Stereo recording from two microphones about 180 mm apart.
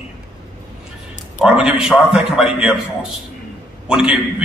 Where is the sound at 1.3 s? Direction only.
5° right (ahead or behind).